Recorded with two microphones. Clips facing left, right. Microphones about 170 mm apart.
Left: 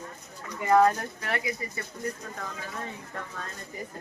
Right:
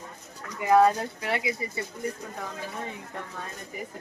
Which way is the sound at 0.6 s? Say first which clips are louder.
Right 1 dB; 15° right (ahead or behind).